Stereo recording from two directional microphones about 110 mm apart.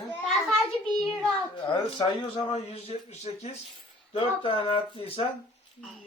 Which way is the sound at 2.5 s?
70° left (ahead or behind).